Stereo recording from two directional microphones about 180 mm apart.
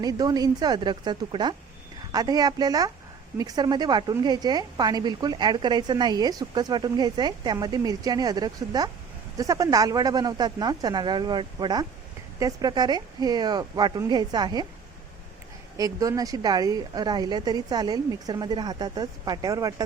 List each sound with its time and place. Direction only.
0.0 s a woman's voice: 20° right (ahead or behind)
15.8 s a woman's voice: 20° right (ahead or behind)